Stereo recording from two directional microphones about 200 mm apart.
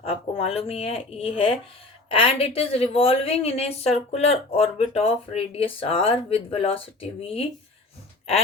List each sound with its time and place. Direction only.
0.0 s a woman's voice: 30° left (ahead or behind)